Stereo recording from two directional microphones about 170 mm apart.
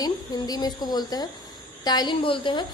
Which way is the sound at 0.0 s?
25° left (ahead or behind).